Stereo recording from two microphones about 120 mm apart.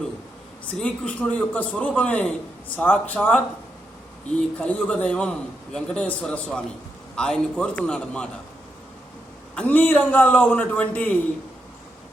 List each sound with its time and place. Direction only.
0.8 s a man's voice: 5° left (ahead or behind)
9.6 s a man's voice: 15° left (ahead or behind)